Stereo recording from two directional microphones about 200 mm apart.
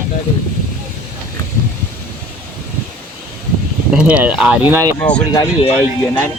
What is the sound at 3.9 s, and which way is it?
Speech, 5° right (ahead or behind).